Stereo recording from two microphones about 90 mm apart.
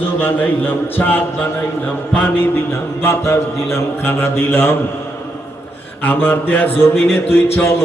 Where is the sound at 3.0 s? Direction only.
30° left (ahead or behind).